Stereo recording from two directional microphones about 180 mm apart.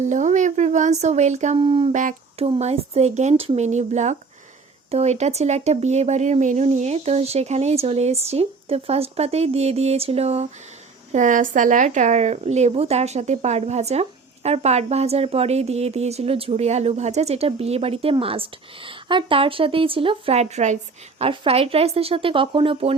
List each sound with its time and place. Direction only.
0.0 s speech: 40° right (ahead or behind)
1.6 s speech: 30° right (ahead or behind)
1.9 s speech: 45° right (ahead or behind)